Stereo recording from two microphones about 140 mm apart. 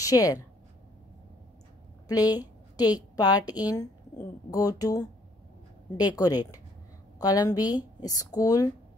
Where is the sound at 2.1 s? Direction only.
25° left (ahead or behind).